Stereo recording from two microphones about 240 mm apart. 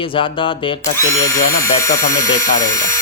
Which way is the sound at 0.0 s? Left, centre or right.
Left.